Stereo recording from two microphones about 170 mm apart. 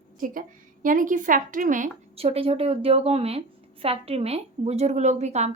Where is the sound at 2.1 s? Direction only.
35° right (ahead or behind).